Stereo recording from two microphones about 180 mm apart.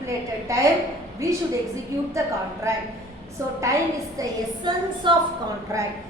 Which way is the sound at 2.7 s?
15° right (ahead or behind).